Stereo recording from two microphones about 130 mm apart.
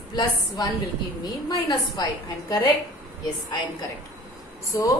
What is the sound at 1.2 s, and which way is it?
A woman's voice, 30° left (ahead or behind).